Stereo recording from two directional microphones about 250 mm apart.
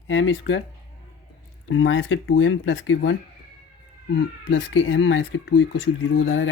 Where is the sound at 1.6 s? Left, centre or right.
Left.